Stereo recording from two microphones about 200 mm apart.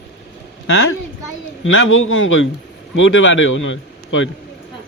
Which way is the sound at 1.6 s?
90° left.